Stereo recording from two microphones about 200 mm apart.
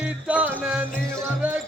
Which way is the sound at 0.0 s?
5° right (ahead or behind).